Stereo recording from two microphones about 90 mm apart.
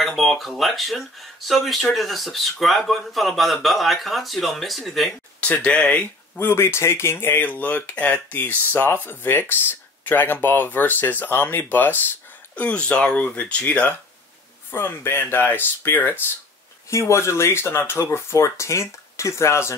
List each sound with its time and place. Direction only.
0.0 s speech: centre (ahead or behind)
5.4 s speech: 15° left (ahead or behind)
6.4 s speech: 30° left (ahead or behind)